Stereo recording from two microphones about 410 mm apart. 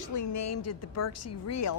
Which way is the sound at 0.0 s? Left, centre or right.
Left.